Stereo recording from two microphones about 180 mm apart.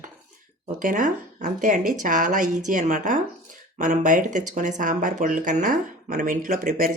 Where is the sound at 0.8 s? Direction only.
45° right (ahead or behind).